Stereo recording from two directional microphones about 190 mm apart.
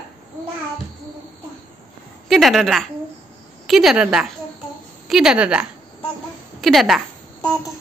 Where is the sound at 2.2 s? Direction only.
Centre (ahead or behind).